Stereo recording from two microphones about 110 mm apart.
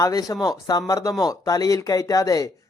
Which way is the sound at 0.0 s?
35° left (ahead or behind).